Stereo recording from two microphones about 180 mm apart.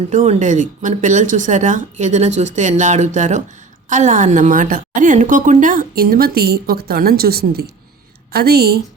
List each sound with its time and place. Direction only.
0.1 s a woman's voice: 40° right (ahead or behind); by 8.7 s 60° right (ahead or behind)